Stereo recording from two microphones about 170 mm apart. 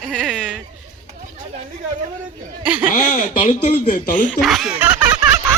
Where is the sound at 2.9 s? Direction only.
55° left (ahead or behind).